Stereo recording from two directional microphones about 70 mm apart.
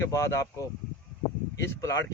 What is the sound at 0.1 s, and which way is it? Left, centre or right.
Speech, left.